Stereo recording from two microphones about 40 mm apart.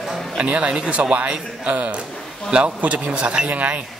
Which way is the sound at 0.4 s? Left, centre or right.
Right.